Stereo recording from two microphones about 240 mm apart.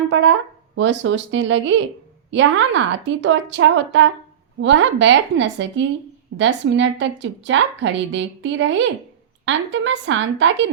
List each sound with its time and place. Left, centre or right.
0.1 s a woman's voice: right